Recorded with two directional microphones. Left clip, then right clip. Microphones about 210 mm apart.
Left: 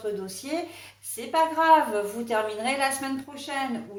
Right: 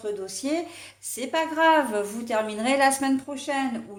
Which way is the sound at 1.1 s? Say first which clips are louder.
Left 2 dB; 45° right (ahead or behind).